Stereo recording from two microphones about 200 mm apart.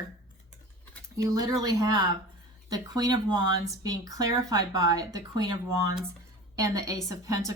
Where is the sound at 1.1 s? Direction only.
20° right (ahead or behind).